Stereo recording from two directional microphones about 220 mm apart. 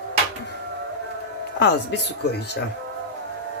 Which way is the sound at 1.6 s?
50° left (ahead or behind).